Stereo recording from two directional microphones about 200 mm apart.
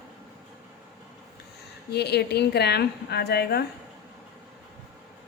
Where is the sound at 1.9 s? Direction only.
55° left (ahead or behind).